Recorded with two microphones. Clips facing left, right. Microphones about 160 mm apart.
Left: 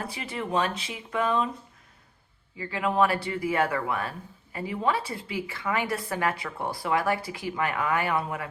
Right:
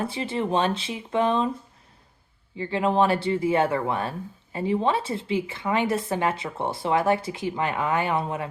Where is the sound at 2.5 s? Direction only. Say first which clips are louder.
Right 3 dB; 25° right (ahead or behind).